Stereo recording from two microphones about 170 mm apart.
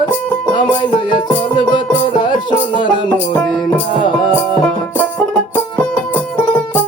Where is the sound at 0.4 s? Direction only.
25° left (ahead or behind).